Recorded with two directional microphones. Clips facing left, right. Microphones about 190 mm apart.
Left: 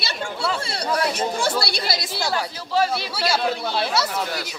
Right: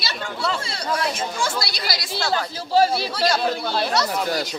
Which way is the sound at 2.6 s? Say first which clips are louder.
Right 5 dB; 35° right (ahead or behind).